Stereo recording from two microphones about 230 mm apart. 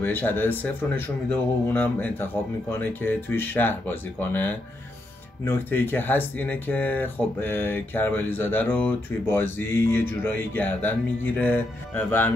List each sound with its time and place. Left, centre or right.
0.0 s speech: centre